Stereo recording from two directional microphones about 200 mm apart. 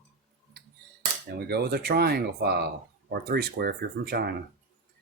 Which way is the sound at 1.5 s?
55° right (ahead or behind).